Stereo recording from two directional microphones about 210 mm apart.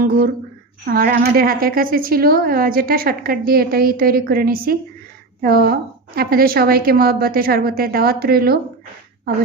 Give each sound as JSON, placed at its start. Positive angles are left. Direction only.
{"t": 0.9, "sound": "a woman's voice", "side_deg": -45}